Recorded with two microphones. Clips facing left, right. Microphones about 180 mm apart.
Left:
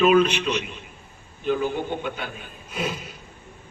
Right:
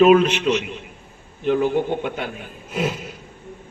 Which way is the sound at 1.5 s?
70° right (ahead or behind).